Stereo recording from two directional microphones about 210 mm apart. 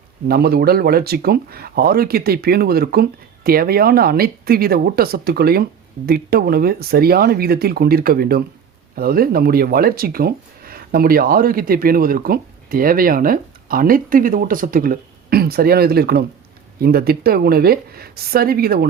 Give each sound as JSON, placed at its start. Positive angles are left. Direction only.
{"t": 0.3, "sound": "speech", "side_deg": -50}